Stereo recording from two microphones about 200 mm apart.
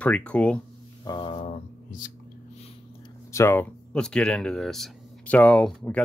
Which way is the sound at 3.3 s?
15° left (ahead or behind).